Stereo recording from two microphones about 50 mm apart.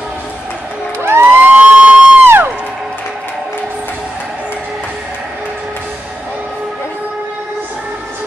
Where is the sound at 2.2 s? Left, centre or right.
Right.